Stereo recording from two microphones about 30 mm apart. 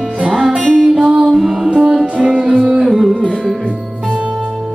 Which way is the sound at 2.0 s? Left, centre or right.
Right.